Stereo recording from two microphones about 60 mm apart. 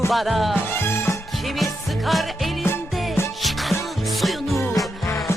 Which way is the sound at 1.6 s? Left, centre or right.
Centre.